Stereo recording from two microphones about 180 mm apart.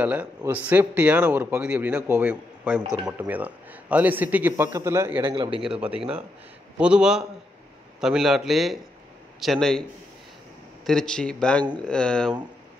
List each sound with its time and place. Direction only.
0.0 s a man's voice: 10° right (ahead or behind)
5.2 s a man's voice: 25° right (ahead or behind)
5.6 s a man's voice: 5° right (ahead or behind)
10.9 s a man's voice: 5° left (ahead or behind)